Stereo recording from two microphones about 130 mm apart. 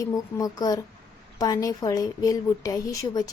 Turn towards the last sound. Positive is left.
turn(degrees=30)  # may be behind; listen again after turning